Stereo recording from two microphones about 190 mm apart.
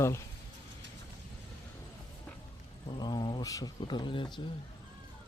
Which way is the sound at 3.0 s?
25° left (ahead or behind).